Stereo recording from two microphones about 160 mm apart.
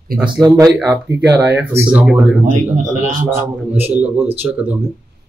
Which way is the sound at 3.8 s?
10° right (ahead or behind).